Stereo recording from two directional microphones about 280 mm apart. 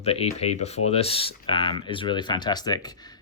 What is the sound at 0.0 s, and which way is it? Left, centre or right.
Speech, left.